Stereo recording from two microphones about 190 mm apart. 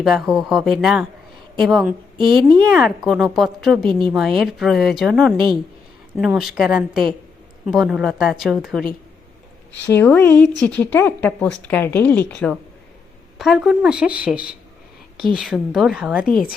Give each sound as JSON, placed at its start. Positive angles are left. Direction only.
{"t": 0.0, "sound": "a woman's voice", "side_deg": 0}
{"t": 10.0, "sound": "a woman's voice", "side_deg": 10}